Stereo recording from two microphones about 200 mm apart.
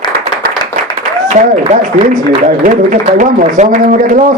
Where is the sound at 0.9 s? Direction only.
40° right (ahead or behind).